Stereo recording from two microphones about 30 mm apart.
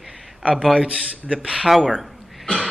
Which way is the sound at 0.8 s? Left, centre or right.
Right.